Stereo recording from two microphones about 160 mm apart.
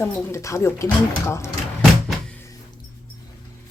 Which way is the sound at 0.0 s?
15° left (ahead or behind).